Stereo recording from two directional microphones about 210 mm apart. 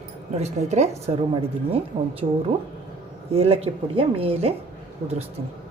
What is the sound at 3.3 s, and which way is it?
A woman's voice, 30° right (ahead or behind).